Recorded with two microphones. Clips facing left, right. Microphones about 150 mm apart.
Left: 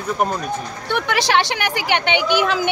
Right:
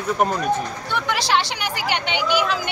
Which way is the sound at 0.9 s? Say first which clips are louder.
Left 3 dB; 65° left (ahead or behind).